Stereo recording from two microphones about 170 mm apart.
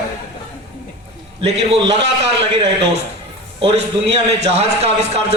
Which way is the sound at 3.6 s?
35° right (ahead or behind).